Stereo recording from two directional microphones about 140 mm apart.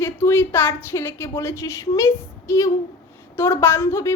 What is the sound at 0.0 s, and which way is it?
A woman's voice, 15° left (ahead or behind).